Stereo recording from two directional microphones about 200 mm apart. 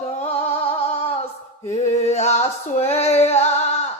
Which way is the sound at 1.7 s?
35° left (ahead or behind).